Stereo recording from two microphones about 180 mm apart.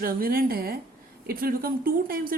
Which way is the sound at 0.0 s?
55° right (ahead or behind).